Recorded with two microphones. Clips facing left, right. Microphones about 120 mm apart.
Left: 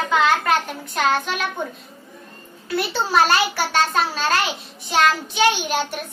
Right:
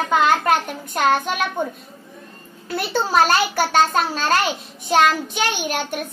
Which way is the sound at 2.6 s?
45° right (ahead or behind).